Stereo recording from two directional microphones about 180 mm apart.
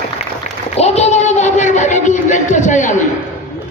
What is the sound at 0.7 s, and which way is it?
Speech, 35° left (ahead or behind).